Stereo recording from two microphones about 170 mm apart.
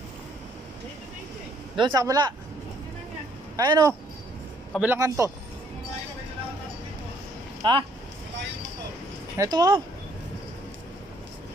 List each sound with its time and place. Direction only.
1.8 s speech: 25° right (ahead or behind)
3.5 s a man's voice: 20° right (ahead or behind)
7.6 s speech: 25° right (ahead or behind)
9.4 s speech: 20° right (ahead or behind)